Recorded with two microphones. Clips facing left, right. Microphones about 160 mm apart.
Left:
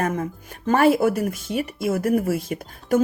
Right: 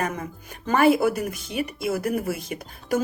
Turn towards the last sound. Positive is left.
turn(degrees=50)  # may be behind; listen again after turning